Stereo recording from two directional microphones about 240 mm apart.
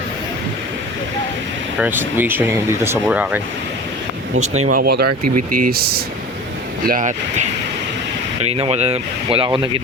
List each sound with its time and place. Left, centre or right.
1.8 s speech: centre
4.7 s speech: right
5.0 s speech: right
5.4 s speech: right